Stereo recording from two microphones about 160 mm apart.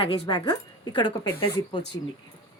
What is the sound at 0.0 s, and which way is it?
Speech, 30° left (ahead or behind).